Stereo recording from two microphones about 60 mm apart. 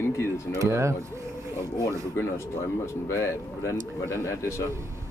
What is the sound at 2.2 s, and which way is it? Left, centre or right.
Speech, left.